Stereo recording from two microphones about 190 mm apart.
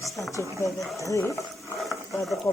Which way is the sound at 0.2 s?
15° left (ahead or behind).